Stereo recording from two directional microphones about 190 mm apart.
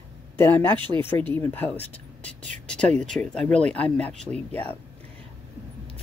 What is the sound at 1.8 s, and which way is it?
Speech, 35° right (ahead or behind).